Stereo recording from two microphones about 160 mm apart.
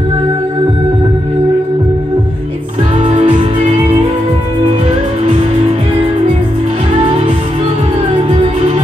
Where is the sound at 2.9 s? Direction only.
40° right (ahead or behind).